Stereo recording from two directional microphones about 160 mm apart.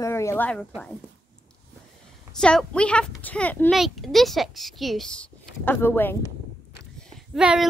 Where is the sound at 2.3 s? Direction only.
5° left (ahead or behind).